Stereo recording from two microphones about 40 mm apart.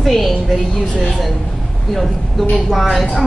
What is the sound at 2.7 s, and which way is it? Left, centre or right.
Speech, centre.